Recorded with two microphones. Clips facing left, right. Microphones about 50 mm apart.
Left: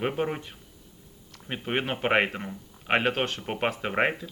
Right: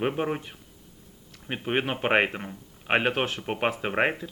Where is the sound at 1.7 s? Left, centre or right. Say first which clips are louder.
Right 1 dB; centre.